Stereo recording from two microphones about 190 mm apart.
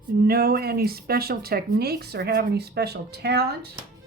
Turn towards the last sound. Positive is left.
turn(degrees=-60)  # may be behind; listen again after turning